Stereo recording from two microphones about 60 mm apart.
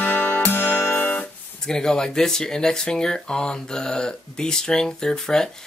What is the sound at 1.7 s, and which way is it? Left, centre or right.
Speech, centre.